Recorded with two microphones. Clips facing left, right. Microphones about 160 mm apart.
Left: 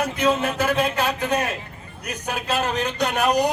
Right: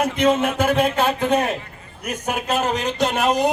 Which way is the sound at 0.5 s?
50° right (ahead or behind).